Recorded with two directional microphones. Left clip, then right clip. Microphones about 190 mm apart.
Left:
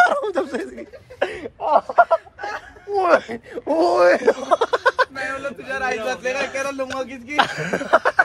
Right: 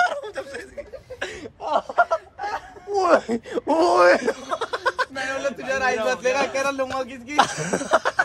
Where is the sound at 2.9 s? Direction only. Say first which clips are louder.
Left 1 dB; 20° right (ahead or behind).